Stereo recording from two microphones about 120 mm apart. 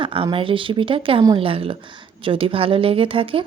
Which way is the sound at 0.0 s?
45° right (ahead or behind).